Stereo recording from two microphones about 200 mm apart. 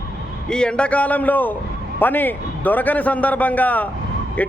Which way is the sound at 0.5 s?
5° left (ahead or behind).